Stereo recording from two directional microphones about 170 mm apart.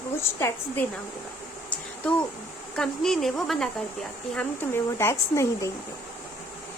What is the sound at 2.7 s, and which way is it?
Speech, 5° left (ahead or behind).